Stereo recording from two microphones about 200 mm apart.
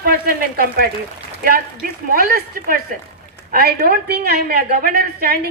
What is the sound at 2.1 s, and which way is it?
A woman's voice, 45° right (ahead or behind).